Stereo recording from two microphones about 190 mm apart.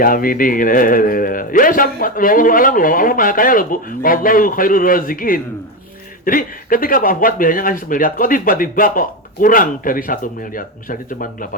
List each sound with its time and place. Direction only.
0.0 s speech: 50° left (ahead or behind)